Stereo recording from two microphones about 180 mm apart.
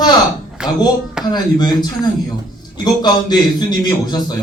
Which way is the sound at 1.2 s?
25° left (ahead or behind).